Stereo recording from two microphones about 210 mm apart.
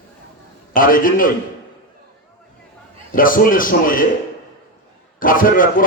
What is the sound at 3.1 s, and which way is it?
Speech, 40° left (ahead or behind).